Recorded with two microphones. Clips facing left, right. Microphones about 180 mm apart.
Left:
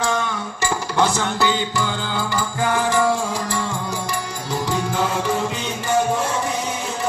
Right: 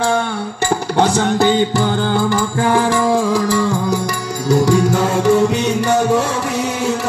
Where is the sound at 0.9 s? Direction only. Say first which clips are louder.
Right 6 dB; 35° right (ahead or behind); by 2.8 s 55° right (ahead or behind).